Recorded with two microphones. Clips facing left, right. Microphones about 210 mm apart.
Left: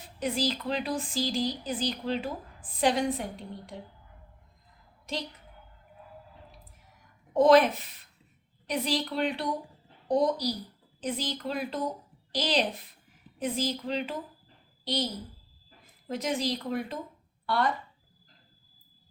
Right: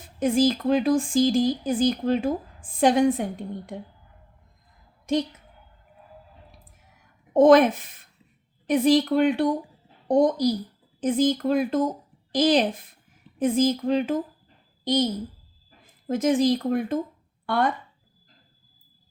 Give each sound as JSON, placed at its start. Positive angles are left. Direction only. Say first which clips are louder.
{"t": 0.2, "sound": "speech", "louder": "right 9 dB", "side_deg": -50}
{"t": 7.3, "sound": "speech", "louder": "right 5 dB", "side_deg": -50}
{"t": 16.0, "sound": "speech", "louder": "right 10 dB", "side_deg": -50}
{"t": 17.4, "sound": "a sound", "louder": "right 5 dB", "side_deg": -50}